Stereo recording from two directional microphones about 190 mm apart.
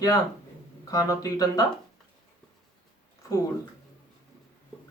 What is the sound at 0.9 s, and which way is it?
Speech, 20° left (ahead or behind).